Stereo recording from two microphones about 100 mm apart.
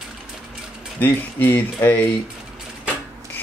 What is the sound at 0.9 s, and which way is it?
Speech, 20° left (ahead or behind).